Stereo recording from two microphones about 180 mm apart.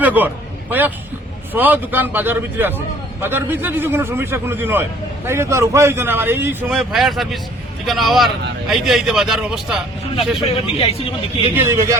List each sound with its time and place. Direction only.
0.0 s a man's voice: 10° right (ahead or behind)
6.7 s a man's voice: centre (ahead or behind)
10.5 s speech: 35° left (ahead or behind)
11.5 s a man's voice: 15° right (ahead or behind)